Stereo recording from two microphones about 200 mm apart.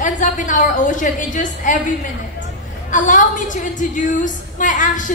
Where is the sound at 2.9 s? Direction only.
40° left (ahead or behind).